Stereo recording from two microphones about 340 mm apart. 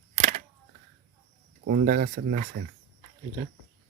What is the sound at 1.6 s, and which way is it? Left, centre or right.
Speech, right.